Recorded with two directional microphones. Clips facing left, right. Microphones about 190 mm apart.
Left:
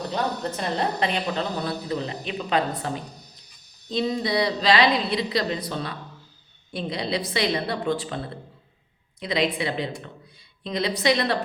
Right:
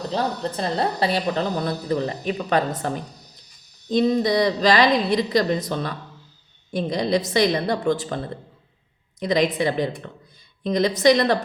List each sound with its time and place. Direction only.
0.1 s a woman's voice: 30° right (ahead or behind)
1.6 s a woman's voice: 45° right (ahead or behind)
9.2 s a woman's voice: 45° right (ahead or behind)